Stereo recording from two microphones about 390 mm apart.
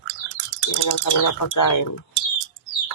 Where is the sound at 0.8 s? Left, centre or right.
Left.